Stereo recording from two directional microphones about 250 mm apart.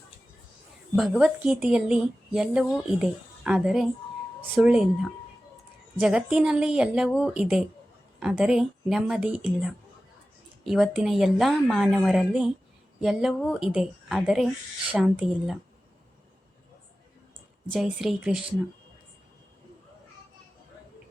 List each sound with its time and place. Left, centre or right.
0.9 s a woman's voice: centre
6.0 s a woman's voice: centre
17.7 s a woman's voice: centre